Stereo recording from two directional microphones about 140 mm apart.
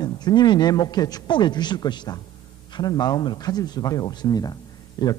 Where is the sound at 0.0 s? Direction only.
30° left (ahead or behind).